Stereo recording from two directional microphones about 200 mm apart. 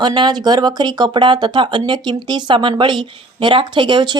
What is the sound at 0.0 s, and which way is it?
Speech, 20° right (ahead or behind).